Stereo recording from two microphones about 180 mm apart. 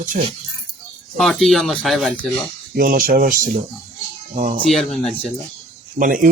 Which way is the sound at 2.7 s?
50° right (ahead or behind).